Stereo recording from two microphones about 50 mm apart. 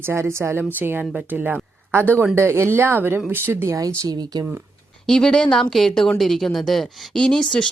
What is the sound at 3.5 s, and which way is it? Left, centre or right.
Speech, right.